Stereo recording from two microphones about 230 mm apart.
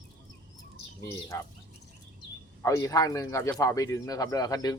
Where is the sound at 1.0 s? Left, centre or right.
Centre.